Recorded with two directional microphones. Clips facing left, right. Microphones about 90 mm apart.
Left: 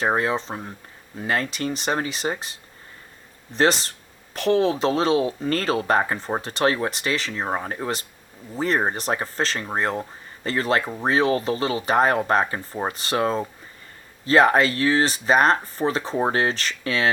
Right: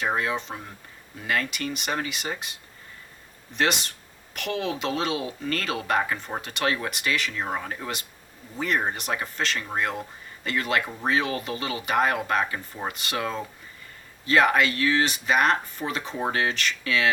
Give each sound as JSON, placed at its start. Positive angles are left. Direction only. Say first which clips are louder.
{"t": 0.0, "sound": "speech", "louder": "left 4 dB", "side_deg": 35}